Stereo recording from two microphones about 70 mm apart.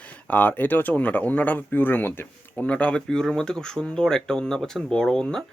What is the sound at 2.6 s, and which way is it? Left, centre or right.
Speech, centre.